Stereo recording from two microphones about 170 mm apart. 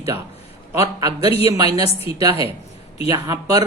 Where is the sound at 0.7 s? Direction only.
15° right (ahead or behind).